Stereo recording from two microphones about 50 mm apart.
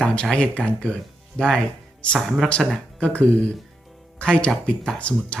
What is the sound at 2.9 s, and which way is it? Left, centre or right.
Speech, left.